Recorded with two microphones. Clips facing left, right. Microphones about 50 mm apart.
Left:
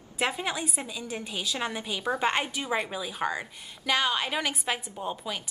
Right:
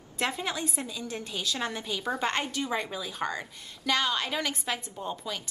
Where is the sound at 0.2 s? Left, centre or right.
Centre.